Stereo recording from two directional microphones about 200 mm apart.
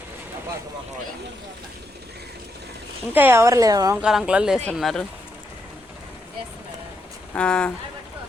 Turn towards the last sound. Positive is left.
turn(degrees=5)  # may be behind; listen again after turning